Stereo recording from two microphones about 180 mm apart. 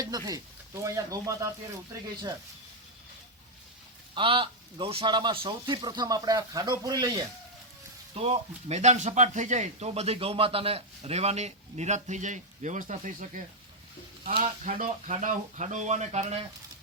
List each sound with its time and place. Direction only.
0.0 s speech: 20° right (ahead or behind)
4.1 s a man's voice: 30° right (ahead or behind)
8.1 s speech: 30° right (ahead or behind)